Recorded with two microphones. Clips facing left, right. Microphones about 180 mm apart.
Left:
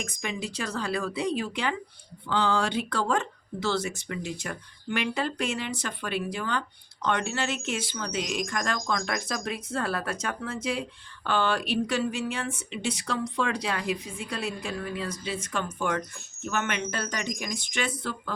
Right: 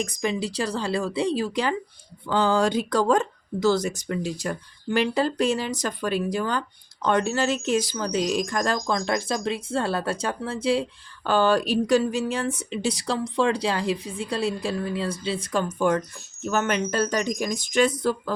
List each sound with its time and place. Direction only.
0.0 s speech: 35° right (ahead or behind)